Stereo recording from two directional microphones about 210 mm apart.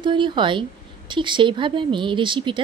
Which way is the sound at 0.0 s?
20° right (ahead or behind).